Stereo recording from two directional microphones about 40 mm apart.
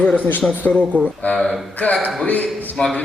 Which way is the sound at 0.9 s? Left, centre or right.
Left.